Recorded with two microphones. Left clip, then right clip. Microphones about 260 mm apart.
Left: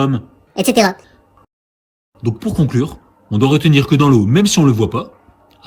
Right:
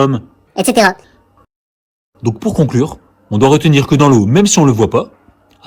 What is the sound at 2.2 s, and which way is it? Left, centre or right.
A man's voice, centre.